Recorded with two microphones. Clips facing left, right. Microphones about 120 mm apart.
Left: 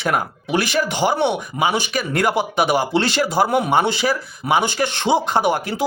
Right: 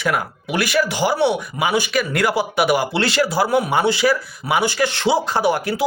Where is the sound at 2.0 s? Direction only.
40° left (ahead or behind).